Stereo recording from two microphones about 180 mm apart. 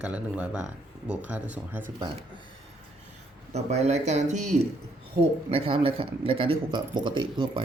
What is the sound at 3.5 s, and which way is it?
Speech, 35° right (ahead or behind).